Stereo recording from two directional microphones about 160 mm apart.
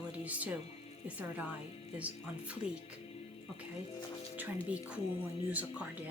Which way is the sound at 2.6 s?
35° left (ahead or behind).